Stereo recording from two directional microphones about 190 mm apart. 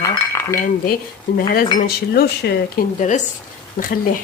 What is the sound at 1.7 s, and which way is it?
Speech, 50° left (ahead or behind).